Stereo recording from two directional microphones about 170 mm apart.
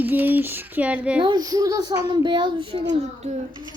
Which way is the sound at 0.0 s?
10° right (ahead or behind).